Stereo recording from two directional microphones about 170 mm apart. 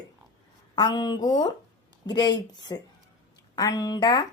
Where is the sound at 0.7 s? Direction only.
25° left (ahead or behind).